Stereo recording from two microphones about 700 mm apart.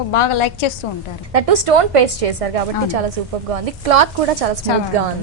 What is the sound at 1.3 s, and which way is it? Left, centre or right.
A woman's voice, right.